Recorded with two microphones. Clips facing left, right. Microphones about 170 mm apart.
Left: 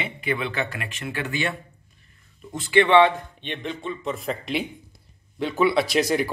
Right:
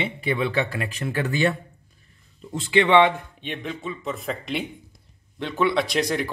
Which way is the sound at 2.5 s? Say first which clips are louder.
Left 1 dB; 20° right (ahead or behind).